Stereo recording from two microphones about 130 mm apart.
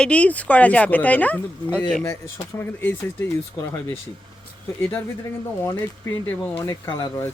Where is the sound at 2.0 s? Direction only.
20° left (ahead or behind).